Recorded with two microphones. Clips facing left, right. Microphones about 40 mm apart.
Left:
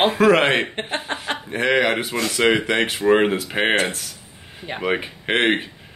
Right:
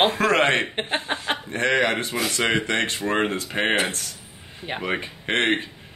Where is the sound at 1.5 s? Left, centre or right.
Centre.